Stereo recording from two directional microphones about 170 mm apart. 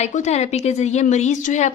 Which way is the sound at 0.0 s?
40° left (ahead or behind).